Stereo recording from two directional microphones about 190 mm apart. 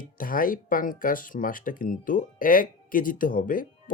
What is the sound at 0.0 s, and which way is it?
Speech, 45° left (ahead or behind).